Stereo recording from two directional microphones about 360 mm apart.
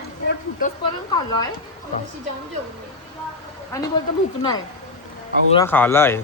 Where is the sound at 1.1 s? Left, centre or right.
Centre.